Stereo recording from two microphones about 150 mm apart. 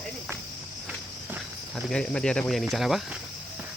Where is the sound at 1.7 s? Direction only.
5° left (ahead or behind).